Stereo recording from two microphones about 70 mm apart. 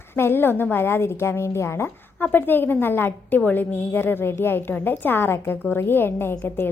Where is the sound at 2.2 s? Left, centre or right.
Left.